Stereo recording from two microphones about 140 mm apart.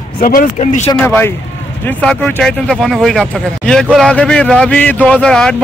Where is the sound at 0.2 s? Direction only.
90° left.